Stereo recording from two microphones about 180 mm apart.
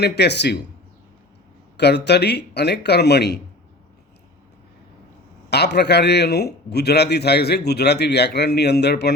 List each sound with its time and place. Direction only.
0.0 s speech: 70° left (ahead or behind)
1.7 s speech: 70° left (ahead or behind)
5.5 s a man's voice: 65° left (ahead or behind)